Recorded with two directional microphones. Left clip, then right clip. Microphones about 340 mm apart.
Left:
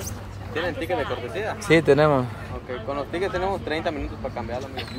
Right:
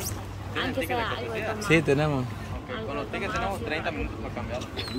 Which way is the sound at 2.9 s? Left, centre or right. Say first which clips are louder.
Left 4 dB; centre.